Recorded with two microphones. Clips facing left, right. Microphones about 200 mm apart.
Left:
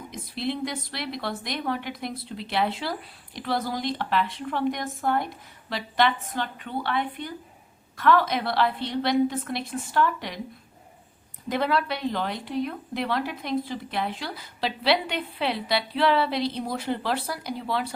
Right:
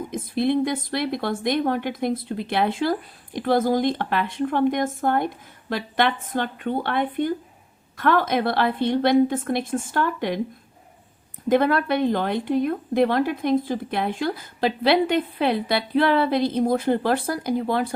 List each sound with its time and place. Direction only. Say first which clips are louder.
0.1 s a woman's voice: right 8 dB; 50° right (ahead or behind)
11.4 s a woman's voice: right 6 dB; 50° right (ahead or behind)